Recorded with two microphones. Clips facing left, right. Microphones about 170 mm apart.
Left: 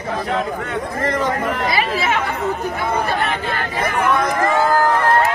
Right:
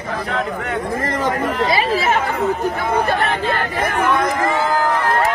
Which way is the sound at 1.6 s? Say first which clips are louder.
Right 5 dB; 30° right (ahead or behind).